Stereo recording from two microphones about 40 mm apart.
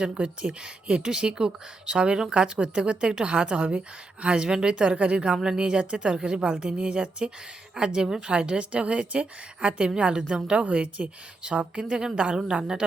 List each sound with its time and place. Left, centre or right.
0.0 s speech: right
5.5 s speech: right